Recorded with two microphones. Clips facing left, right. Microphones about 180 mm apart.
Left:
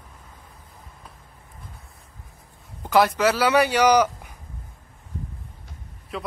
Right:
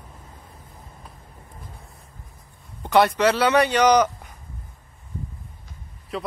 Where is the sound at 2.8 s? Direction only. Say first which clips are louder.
Right 1 dB; centre (ahead or behind).